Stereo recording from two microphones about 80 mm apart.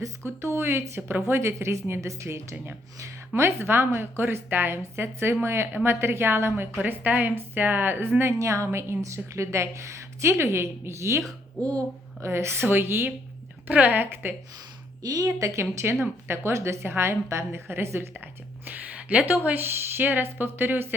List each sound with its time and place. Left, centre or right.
0.4 s a woman's voice: right
11.6 s speech: centre
12.2 s speech: right
15.0 s a woman's voice: right
18.6 s speech: centre